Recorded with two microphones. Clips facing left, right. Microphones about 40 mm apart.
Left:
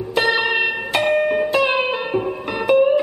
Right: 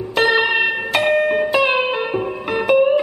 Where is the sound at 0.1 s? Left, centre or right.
Centre.